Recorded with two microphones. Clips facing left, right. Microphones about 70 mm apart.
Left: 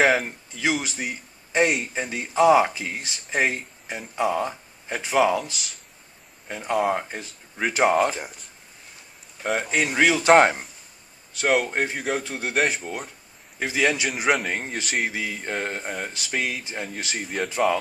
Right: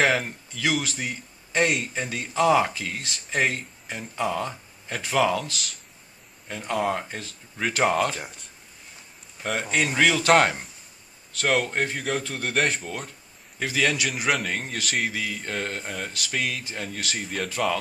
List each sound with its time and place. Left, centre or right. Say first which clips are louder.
0.0 s speech: left 3 dB; centre
0.5 s speech: left 1 dB; left
9.4 s speech: left 2 dB; centre
14.9 s speech: left 1 dB; centre
15.1 s speech: left 1 dB; left
17.2 s speech: left 4 dB; centre